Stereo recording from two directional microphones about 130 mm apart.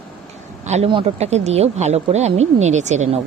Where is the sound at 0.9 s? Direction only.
45° right (ahead or behind); by 3.2 s 65° right (ahead or behind).